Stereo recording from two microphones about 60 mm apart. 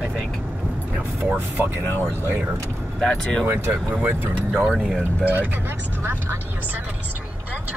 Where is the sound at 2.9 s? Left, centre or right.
Centre.